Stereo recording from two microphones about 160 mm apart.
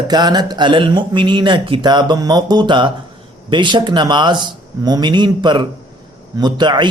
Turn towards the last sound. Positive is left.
turn(degrees=-25)  # may be behind; listen again after turning